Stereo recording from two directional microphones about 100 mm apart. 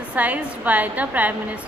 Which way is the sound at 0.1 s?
15° right (ahead or behind).